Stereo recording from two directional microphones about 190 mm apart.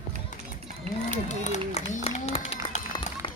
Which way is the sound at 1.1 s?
40° left (ahead or behind).